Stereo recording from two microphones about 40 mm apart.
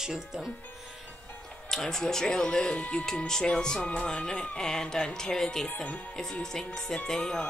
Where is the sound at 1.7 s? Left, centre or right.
Centre.